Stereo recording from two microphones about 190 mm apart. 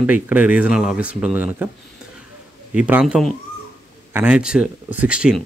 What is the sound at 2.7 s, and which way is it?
Speech, 5° right (ahead or behind).